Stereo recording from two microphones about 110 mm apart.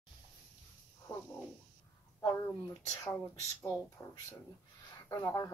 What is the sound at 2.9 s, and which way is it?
Speech, 30° left (ahead or behind).